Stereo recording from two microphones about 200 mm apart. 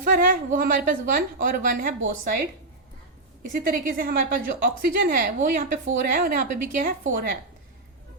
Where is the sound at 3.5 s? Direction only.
45° right (ahead or behind).